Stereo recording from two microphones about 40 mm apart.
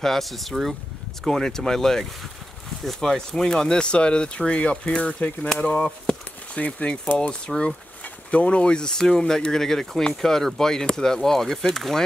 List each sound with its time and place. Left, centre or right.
0.0 s speech: centre; by 5.5 s left
6.5 s speech: left; by 12.0 s centre